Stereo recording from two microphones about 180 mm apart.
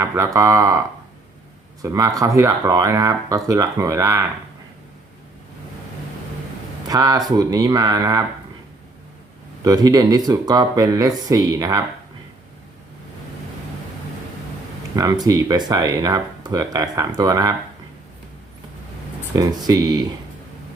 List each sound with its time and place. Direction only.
0.0 s speech: 15° right (ahead or behind)
1.8 s speech: 20° right (ahead or behind)
6.8 s speech: 20° right (ahead or behind)
9.6 s speech: 20° right (ahead or behind)
14.9 s speech: 20° right (ahead or behind)
19.3 s speech: 20° right (ahead or behind)